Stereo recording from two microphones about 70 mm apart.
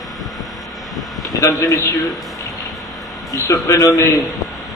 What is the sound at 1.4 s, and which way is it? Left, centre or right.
Speech, left.